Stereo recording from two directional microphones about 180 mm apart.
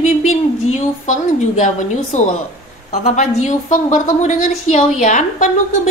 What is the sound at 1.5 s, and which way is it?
A woman's voice, 45° left (ahead or behind).